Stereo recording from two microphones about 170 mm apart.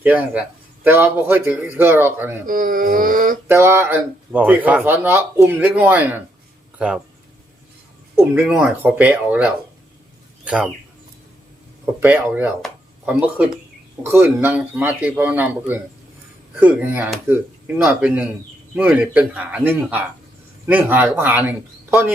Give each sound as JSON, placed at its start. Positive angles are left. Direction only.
{"t": 0.0, "sound": "speech", "side_deg": -10}
{"t": 2.5, "sound": "a sound", "side_deg": -55}
{"t": 3.5, "sound": "speech", "side_deg": -15}
{"t": 8.1, "sound": "speech", "side_deg": -10}
{"t": 11.9, "sound": "speech", "side_deg": -10}